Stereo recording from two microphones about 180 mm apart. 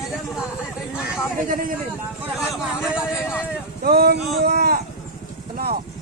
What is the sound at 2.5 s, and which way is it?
Speech, 5° right (ahead or behind).